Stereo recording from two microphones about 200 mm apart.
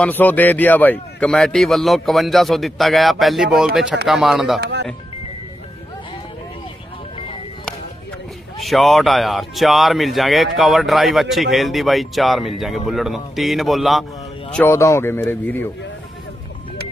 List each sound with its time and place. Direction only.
0.0 s speech: 10° left (ahead or behind)
4.6 s music: 55° right (ahead or behind)
8.5 s speech: centre (ahead or behind)
14.5 s speech: 10° left (ahead or behind)